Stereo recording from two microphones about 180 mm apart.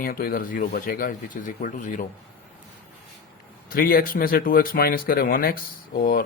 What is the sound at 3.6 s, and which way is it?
Speech, 55° left (ahead or behind).